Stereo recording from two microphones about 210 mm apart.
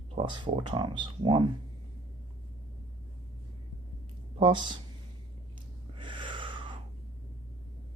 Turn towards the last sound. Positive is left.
turn(degrees=-25)  # may be behind; listen again after turning